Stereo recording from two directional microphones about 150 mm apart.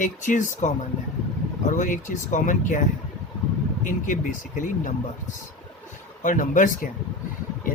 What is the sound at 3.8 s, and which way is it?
Speech, 60° left (ahead or behind).